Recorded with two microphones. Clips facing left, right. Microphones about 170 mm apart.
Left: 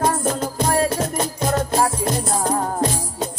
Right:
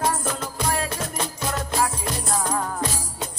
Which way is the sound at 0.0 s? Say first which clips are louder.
Left 5 dB; 40° left (ahead or behind).